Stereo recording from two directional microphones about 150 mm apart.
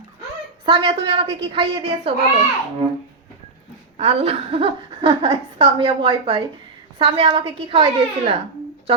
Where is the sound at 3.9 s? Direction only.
45° right (ahead or behind).